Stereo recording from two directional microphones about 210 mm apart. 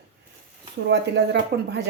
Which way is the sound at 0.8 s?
55° right (ahead or behind).